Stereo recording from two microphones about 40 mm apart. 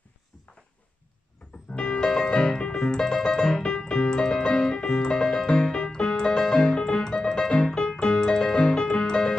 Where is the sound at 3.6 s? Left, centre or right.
Left.